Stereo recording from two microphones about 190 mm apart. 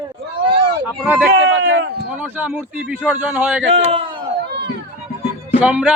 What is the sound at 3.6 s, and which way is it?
Speech, 30° right (ahead or behind).